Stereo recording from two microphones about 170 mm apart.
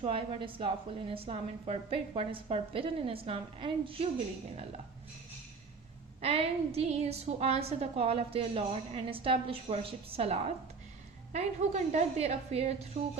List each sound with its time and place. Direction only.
0.0 s a woman's voice: 30° right (ahead or behind)
6.2 s a woman's voice: 35° right (ahead or behind)